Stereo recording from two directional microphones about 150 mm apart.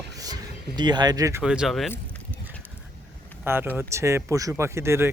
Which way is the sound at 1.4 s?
5° right (ahead or behind).